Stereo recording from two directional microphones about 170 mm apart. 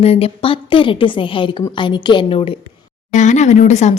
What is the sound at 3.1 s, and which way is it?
Speech, 45° left (ahead or behind).